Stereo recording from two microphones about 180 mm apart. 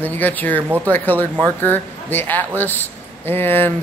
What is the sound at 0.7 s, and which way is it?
Speech, 10° right (ahead or behind).